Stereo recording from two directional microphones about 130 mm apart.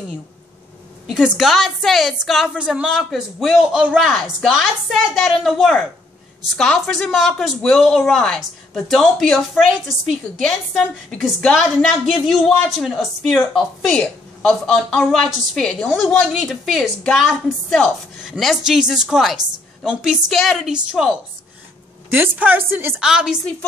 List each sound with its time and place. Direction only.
1.1 s a woman's voice: 5° right (ahead or behind)
22.9 s speech: 5° right (ahead or behind)